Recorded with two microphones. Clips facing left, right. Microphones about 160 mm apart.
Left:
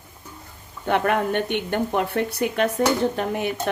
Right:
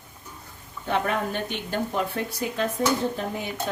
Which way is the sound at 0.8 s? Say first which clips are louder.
Left 5 dB; 60° left (ahead or behind).